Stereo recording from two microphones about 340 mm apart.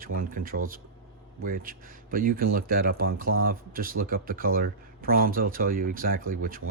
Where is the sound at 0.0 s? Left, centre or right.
Right.